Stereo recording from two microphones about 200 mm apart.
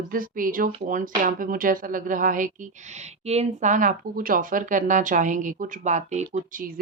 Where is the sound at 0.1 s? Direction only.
45° right (ahead or behind).